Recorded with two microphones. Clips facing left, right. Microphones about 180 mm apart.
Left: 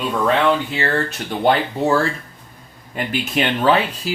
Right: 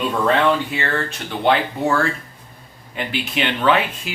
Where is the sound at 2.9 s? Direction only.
45° left (ahead or behind).